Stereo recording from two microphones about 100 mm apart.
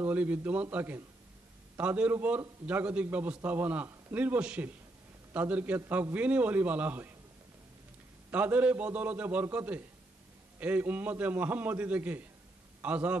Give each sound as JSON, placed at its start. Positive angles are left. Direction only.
{"t": 0.0, "sound": "a man's voice", "side_deg": -15}
{"t": 8.3, "sound": "a man's voice", "side_deg": -15}